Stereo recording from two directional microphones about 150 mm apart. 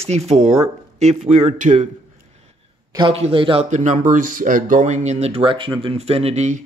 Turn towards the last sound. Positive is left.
turn(degrees=-50)  # may be behind; listen again after turning